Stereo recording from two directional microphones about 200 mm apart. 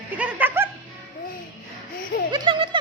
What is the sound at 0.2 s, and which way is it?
Music, 10° right (ahead or behind).